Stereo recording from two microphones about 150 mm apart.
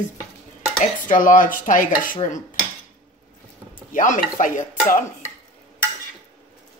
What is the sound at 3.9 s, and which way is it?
Speech, 60° left (ahead or behind).